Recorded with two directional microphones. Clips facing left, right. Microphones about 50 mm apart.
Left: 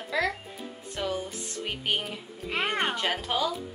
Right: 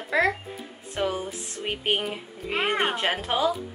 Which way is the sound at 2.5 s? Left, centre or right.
Centre.